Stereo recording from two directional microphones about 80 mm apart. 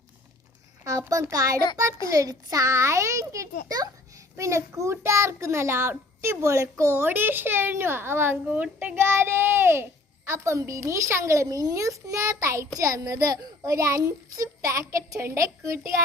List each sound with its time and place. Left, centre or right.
0.9 s a child's voice: right; by 9.0 s centre
9.0 s a child's voice: right